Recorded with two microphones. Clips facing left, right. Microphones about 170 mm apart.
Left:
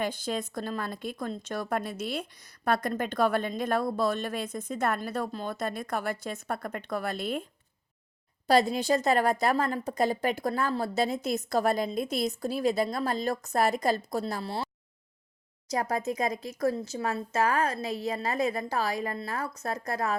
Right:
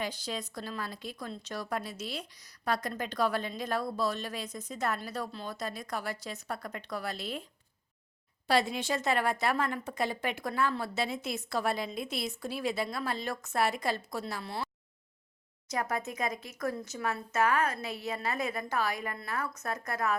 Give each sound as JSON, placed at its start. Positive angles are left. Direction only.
{"t": 0.0, "sound": "a woman's voice", "side_deg": 50}
{"t": 8.4, "sound": "a woman's voice", "side_deg": 40}
{"t": 15.7, "sound": "a woman's voice", "side_deg": 35}